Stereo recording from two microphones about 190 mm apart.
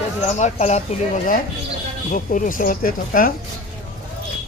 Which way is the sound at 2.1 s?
45° left (ahead or behind).